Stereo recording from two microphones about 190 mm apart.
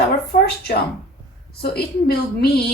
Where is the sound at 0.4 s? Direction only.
55° left (ahead or behind).